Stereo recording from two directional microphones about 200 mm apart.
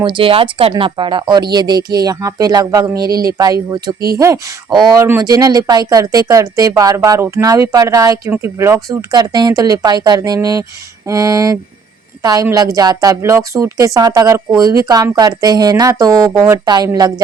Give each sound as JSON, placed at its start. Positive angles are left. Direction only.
{"t": 0.0, "sound": "speech", "side_deg": -25}